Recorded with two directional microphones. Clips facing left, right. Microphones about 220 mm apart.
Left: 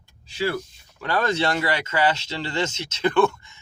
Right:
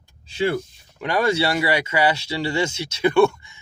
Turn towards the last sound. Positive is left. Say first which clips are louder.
# right 3 dB
turn(degrees=-10)  # may be behind; listen again after turning